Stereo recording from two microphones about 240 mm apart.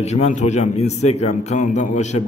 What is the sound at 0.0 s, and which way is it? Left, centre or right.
A man's voice, left.